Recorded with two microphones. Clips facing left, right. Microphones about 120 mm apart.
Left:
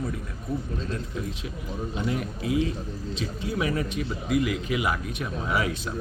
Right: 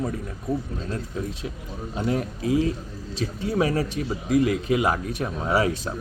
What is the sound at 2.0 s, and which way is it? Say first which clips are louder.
Speech: right 5 dB; 35° right (ahead or behind).